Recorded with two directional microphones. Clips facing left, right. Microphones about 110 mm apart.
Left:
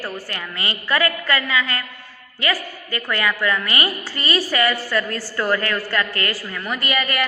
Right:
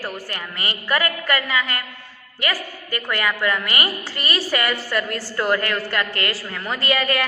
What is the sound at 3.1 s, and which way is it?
A woman's voice, 25° right (ahead or behind).